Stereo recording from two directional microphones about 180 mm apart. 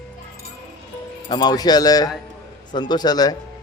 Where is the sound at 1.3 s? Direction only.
25° left (ahead or behind).